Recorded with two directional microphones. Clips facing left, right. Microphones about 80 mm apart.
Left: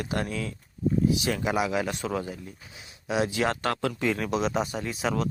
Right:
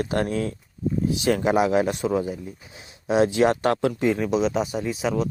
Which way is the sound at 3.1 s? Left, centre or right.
Right.